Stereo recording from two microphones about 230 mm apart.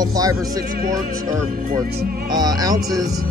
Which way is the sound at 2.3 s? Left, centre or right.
Centre.